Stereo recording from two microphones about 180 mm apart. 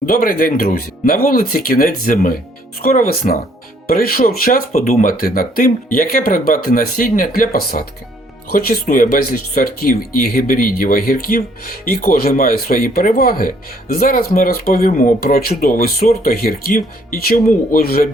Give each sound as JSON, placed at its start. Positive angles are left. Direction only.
{"t": 0.0, "sound": "speech", "side_deg": 50}